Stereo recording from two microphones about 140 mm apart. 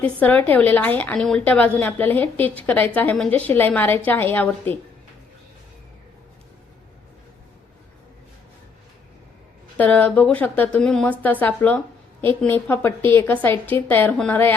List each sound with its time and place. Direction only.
0.0 s a woman's voice: 10° left (ahead or behind)
9.7 s a woman's voice: 10° left (ahead or behind)